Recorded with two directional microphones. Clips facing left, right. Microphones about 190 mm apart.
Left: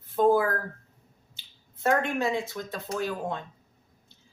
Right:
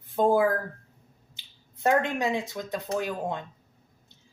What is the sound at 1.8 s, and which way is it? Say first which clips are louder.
Speech: right 1 dB; 15° right (ahead or behind).